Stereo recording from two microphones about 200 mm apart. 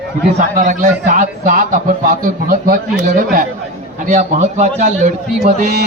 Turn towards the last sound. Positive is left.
turn(degrees=-35)  # may be behind; listen again after turning